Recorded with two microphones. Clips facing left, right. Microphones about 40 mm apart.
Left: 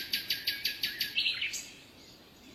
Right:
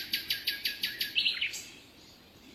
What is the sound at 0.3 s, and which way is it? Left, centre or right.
Bird, right.